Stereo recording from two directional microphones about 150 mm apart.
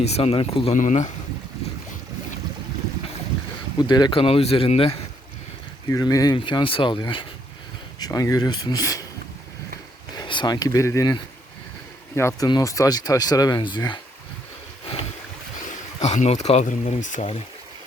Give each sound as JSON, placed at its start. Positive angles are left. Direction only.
{"t": 0.0, "sound": "speech", "side_deg": 45}
{"t": 0.8, "sound": "speech", "side_deg": 55}
{"t": 3.8, "sound": "speech", "side_deg": 30}
{"t": 5.9, "sound": "speech", "side_deg": 25}
{"t": 10.2, "sound": "speech", "side_deg": 30}
{"t": 16.0, "sound": "speech", "side_deg": 50}